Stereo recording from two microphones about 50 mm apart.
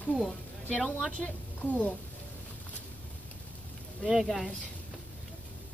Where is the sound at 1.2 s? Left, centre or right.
Left.